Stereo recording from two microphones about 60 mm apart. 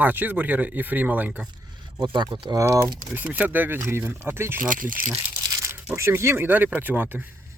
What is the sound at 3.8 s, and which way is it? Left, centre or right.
Speech, right.